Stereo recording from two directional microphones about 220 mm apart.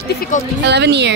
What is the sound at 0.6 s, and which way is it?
Speech, 50° right (ahead or behind).